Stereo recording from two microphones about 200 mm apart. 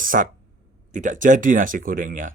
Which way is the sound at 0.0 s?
45° right (ahead or behind).